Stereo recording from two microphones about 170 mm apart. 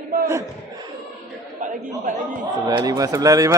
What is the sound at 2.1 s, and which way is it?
Speech, 50° right (ahead or behind).